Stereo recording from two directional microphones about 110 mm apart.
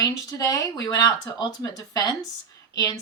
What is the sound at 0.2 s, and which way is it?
Speech, 35° left (ahead or behind).